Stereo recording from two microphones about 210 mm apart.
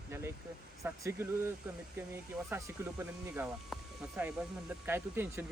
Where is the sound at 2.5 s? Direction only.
10° right (ahead or behind).